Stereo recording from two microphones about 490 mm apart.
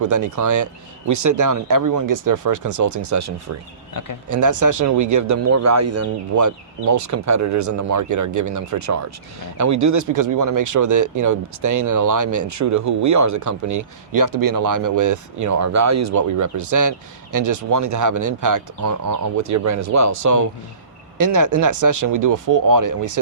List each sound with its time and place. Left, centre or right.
0.0 s speech: right
3.9 s speech: left
4.3 s speech: right